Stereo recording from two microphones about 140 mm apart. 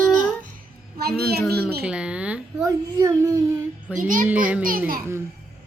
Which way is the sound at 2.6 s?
20° right (ahead or behind).